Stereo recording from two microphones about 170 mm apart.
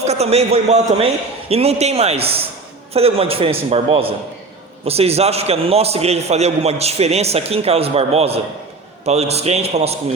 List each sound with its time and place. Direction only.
0.0 s a man's voice: 40° right (ahead or behind)